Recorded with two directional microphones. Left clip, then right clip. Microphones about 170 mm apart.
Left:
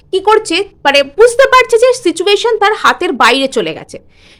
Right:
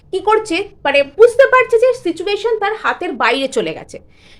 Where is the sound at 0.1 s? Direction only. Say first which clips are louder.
Left 5 dB; 35° left (ahead or behind).